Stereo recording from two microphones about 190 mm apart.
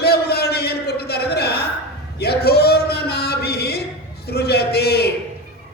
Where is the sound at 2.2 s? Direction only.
55° left (ahead or behind).